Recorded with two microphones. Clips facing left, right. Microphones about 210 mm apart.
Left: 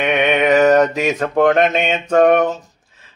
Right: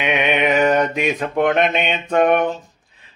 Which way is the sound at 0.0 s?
50° left (ahead or behind).